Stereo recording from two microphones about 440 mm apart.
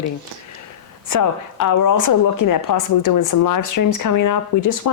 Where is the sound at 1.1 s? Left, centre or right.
Left.